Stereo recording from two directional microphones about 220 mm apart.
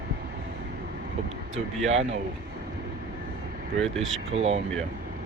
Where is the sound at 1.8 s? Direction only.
30° right (ahead or behind).